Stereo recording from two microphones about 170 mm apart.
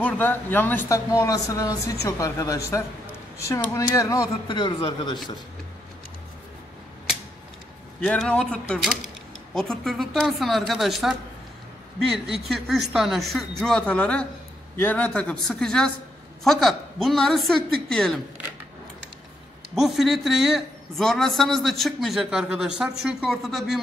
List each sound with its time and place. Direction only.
0.0 s speech: 10° left (ahead or behind)
8.0 s a man's voice: 5° left (ahead or behind)
19.7 s a man's voice: centre (ahead or behind)